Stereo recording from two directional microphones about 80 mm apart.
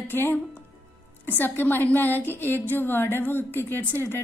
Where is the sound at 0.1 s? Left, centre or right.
Left.